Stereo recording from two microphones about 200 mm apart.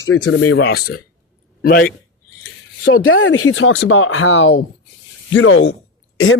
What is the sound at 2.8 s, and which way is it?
A man's voice, 90° left.